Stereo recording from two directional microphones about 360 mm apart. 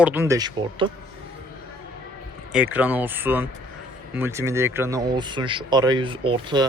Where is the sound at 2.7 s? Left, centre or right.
Centre.